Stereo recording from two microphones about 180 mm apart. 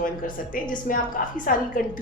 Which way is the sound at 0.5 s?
50° left (ahead or behind).